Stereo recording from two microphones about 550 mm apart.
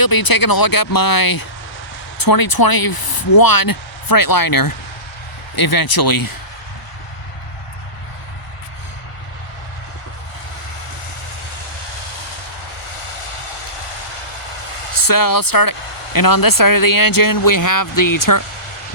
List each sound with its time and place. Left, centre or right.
0.0 s speech: left
15.0 s speech: left